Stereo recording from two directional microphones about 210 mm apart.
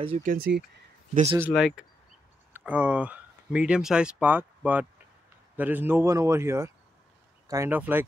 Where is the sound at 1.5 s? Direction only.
Centre (ahead or behind).